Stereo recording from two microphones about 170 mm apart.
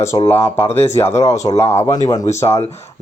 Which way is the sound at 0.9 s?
15° left (ahead or behind).